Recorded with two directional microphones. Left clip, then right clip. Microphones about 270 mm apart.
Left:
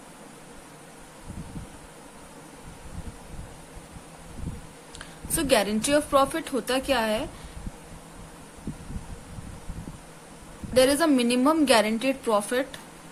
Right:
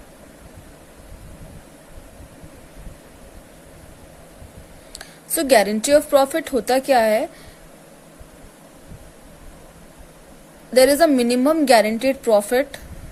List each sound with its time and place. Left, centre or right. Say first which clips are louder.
4.9 s speech: right 6 dB; centre
10.8 s speech: right 7 dB; centre